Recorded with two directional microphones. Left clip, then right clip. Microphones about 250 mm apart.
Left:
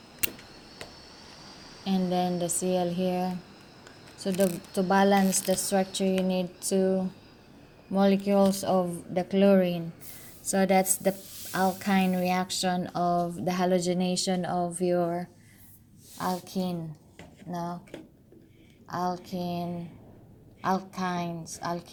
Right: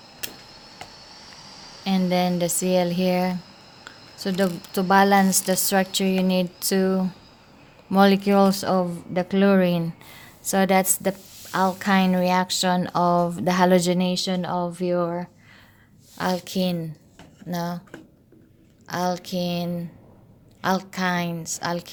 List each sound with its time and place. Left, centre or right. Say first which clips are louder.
1.8 s speech: right 5 dB; right
16.1 s a woman's voice: right 6 dB; right
18.9 s a woman's voice: right 5 dB; right